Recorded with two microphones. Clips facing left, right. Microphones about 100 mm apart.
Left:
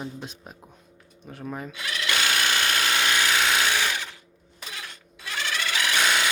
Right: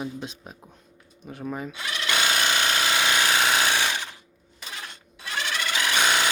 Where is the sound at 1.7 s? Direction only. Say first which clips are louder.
Left 1 dB; 20° right (ahead or behind).